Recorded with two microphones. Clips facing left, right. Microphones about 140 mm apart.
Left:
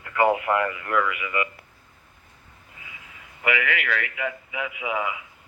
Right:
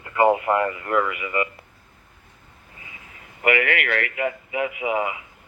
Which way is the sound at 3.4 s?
55° right (ahead or behind).